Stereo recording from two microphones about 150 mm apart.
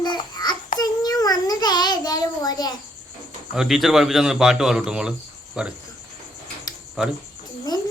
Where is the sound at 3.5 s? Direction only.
5° right (ahead or behind).